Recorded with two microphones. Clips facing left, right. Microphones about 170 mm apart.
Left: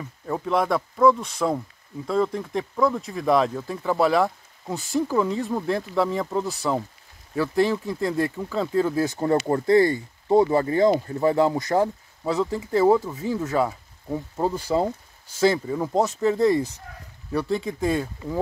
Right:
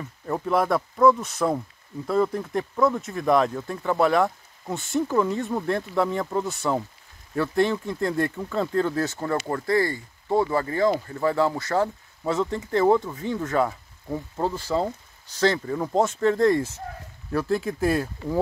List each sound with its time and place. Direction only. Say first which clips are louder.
0.3 s speech: even; centre (ahead or behind)
9.2 s speech: left 5 dB; 25° left (ahead or behind)
12.2 s speech: left 1 dB; centre (ahead or behind)